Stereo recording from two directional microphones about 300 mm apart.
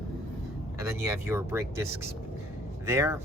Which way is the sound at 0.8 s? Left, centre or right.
Centre.